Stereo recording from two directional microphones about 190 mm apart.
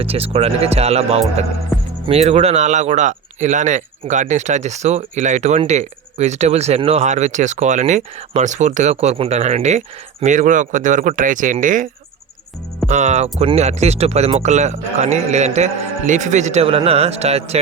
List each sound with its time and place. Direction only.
0.0 s speech: 30° right (ahead or behind)
12.9 s speech: 40° right (ahead or behind)